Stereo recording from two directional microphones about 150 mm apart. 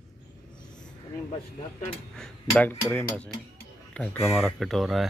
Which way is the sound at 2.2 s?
10° left (ahead or behind).